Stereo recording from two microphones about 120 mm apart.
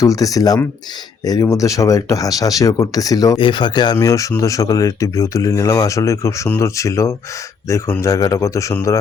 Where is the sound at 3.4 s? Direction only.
40° left (ahead or behind); by 8.7 s 25° left (ahead or behind).